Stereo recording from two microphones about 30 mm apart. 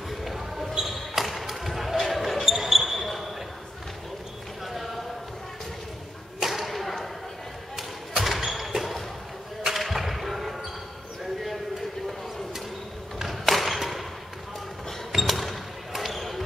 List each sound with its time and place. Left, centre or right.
0.1 s basketball bounce: centre
4.6 s basketball bounce: centre
6.5 s whip: centre
8.2 s thump: centre
13.2 s a sound: centre
15.1 s basketball bounce: centre